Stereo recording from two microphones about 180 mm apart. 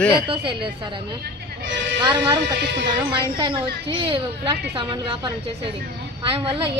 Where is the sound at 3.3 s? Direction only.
25° right (ahead or behind).